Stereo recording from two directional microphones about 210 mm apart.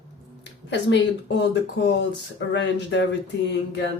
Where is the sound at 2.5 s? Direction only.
55° left (ahead or behind).